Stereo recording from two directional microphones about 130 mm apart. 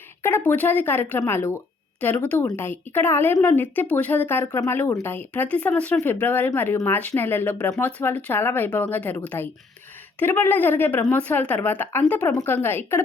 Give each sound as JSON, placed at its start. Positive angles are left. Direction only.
{"t": 0.2, "sound": "speech", "side_deg": 15}